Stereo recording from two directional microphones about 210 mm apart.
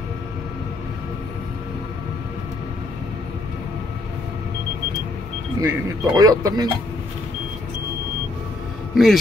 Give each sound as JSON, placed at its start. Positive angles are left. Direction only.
{"t": 5.6, "sound": "speech", "side_deg": -15}
{"t": 8.9, "sound": "a man's voice", "side_deg": 0}